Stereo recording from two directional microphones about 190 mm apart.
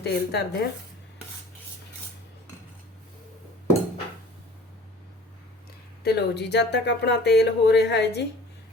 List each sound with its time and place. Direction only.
0.0 s speech: 60° left (ahead or behind)
6.0 s speech: 60° left (ahead or behind)